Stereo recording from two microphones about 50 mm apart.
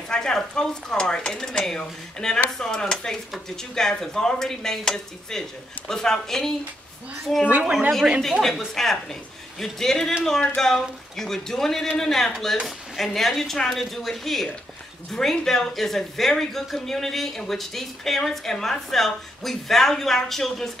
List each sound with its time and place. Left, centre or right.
0.1 s speech: centre
7.4 s a woman's voice: right
8.2 s speech: centre